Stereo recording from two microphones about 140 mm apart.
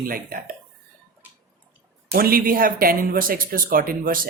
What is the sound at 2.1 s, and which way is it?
Speech, 90° right.